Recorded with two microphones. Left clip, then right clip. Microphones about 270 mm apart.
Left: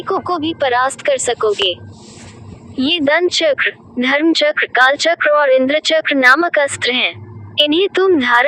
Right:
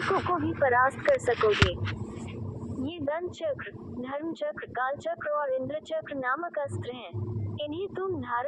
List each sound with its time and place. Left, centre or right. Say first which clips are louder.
0.1 s speech: left 12 dB; left
2.8 s speech: left 19 dB; left